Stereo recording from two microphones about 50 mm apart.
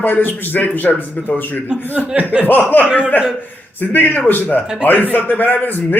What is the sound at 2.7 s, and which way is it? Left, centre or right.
Speech, left.